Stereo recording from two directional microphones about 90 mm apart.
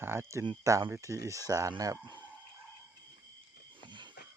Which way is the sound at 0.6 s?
35° right (ahead or behind).